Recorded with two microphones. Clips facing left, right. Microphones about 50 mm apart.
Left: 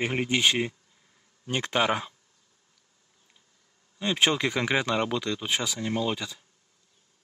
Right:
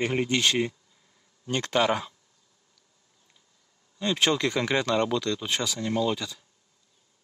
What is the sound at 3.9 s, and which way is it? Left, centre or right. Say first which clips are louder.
Speech: even; centre.